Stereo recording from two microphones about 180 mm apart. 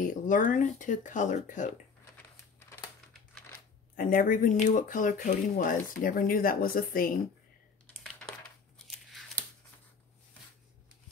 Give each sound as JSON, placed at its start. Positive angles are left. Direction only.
{"t": 0.0, "sound": "speech", "side_deg": 50}
{"t": 3.9, "sound": "speech", "side_deg": 50}
{"t": 8.8, "sound": "a sound", "side_deg": 0}